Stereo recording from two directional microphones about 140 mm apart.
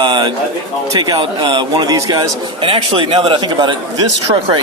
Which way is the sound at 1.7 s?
30° right (ahead or behind).